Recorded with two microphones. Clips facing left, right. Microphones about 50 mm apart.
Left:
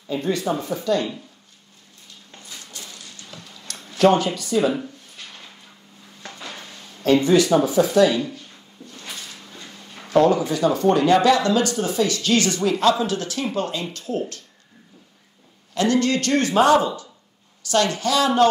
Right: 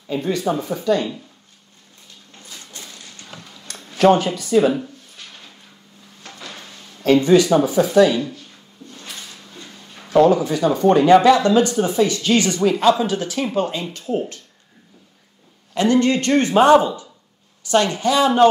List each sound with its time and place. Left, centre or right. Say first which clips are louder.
0.1 s speech: right 1 dB; centre
0.5 s speech: right 5 dB; centre
2.5 s a sound: right 1 dB; right
4.4 s speech: right 4 dB; right
6.3 s a sound: right 1 dB; left
6.7 s a sound: right 2 dB; centre
7.2 s speech: right 3 dB; centre
7.6 s speech: right 1 dB; centre
10.0 s speech: right 3 dB; centre
11.1 s speech: right 6 dB; right
12.6 s speech: right 5 dB; centre
15.7 s speech: right 3 dB; right